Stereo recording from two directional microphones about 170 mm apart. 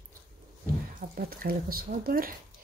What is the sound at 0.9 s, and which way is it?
Speech, 60° right (ahead or behind).